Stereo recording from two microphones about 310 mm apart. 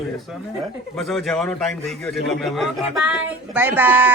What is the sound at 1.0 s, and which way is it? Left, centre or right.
Speech, centre.